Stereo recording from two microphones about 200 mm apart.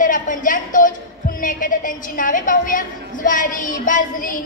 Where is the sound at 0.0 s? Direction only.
40° left (ahead or behind).